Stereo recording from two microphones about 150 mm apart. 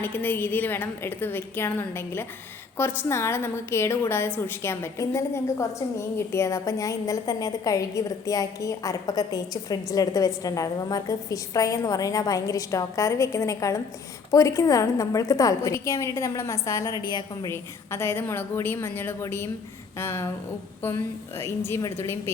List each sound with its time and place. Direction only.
0.0 s a woman's voice: 15° left (ahead or behind); by 17.5 s 30° left (ahead or behind)
17.5 s a woman's voice: 15° left (ahead or behind)